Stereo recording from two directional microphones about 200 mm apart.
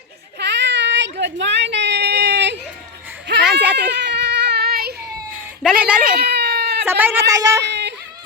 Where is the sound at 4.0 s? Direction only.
55° right (ahead or behind).